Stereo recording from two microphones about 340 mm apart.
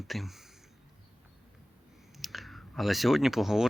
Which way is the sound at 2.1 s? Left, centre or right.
Centre.